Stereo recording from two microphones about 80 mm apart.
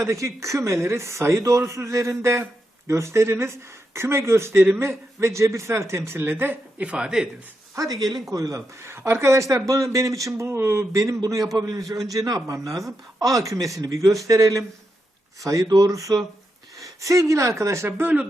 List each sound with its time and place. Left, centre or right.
0.0 s speech: right; by 7.3 s centre
7.9 s speech: right
8.3 s speech: right